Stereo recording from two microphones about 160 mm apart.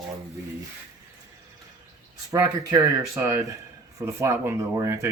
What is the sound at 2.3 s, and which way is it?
Speech, 20° right (ahead or behind).